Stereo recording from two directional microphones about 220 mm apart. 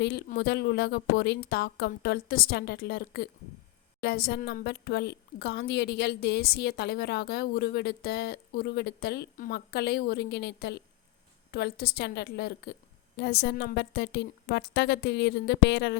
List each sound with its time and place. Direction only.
0.0 s a woman's voice: 50° left (ahead or behind)